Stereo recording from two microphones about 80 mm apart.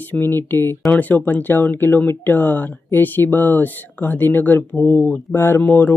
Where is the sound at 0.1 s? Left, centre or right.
Left.